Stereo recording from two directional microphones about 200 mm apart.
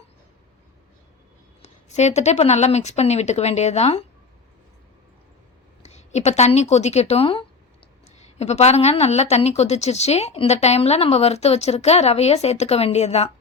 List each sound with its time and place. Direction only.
1.6 s a woman's voice: 35° left (ahead or behind)
5.8 s a woman's voice: 35° left (ahead or behind)